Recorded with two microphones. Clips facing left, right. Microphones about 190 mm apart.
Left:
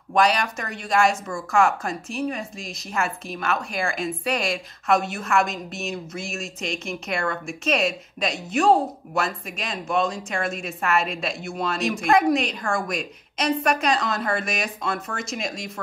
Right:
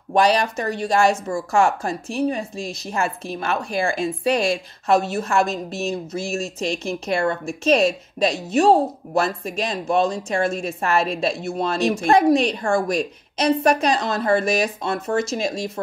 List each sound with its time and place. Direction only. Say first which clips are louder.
0.1 s speech: right 3 dB; 30° right (ahead or behind)